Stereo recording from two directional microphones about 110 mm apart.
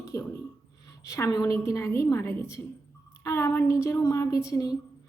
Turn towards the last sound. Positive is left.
turn(degrees=30)  # may be behind; listen again after turning